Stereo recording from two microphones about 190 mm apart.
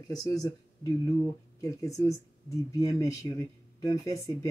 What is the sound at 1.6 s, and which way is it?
Speech, 15° left (ahead or behind).